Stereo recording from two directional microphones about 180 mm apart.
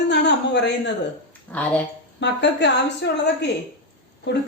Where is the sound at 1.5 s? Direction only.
10° left (ahead or behind).